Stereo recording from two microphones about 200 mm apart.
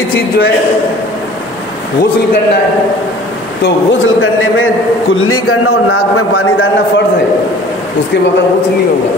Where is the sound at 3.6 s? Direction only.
85° left.